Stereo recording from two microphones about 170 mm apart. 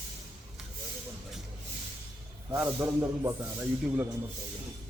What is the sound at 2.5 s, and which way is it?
Speech, 10° right (ahead or behind).